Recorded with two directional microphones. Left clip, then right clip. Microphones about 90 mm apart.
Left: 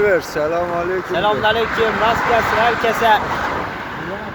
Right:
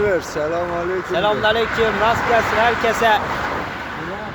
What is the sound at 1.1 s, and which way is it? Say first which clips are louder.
Speech: left 1 dB; 20° right (ahead or behind).